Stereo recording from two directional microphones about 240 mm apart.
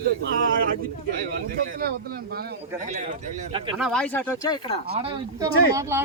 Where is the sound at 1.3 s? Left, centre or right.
Right.